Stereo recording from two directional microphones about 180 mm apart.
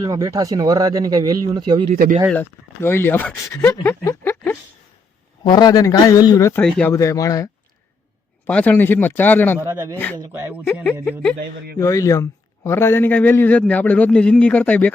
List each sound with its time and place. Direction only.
0.0 s speech: 20° right (ahead or behind)
1.9 s speech: 45° right (ahead or behind)
2.3 s speech: 10° left (ahead or behind)
5.4 s speech: 25° left (ahead or behind)
6.7 s speech: 5° left (ahead or behind)
6.9 s a man's voice: 15° left (ahead or behind)
8.4 s a man's voice: 10° left (ahead or behind)
9.6 s speech: 15° right (ahead or behind)
9.9 s a man's voice: 10° left (ahead or behind)
10.2 s speech: 15° right (ahead or behind)
10.7 s speech: centre (ahead or behind)
11.3 s speech: 60° right (ahead or behind)
11.8 s a man's voice: 20° left (ahead or behind)